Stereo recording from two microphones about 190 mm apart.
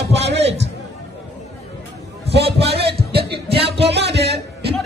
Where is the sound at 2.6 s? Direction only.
30° right (ahead or behind).